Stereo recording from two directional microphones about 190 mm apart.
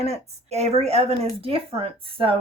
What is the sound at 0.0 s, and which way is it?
Speech, 35° right (ahead or behind).